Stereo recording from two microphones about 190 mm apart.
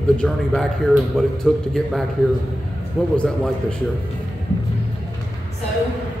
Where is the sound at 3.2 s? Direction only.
5° left (ahead or behind).